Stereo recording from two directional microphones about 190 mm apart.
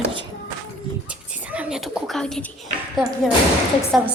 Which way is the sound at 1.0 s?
5° right (ahead or behind).